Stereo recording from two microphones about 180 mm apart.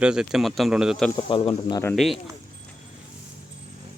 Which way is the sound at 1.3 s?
30° left (ahead or behind).